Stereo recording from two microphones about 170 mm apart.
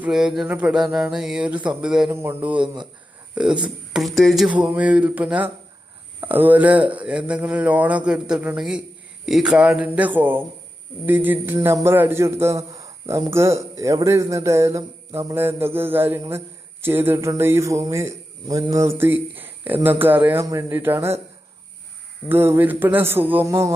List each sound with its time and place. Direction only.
0.0 s a sound: 5° right (ahead or behind)
2.2 s a man's voice: 10° right (ahead or behind)
22.3 s a man's voice: 10° right (ahead or behind)